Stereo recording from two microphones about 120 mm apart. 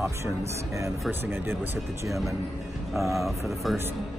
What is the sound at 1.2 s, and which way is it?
Speech, 20° right (ahead or behind).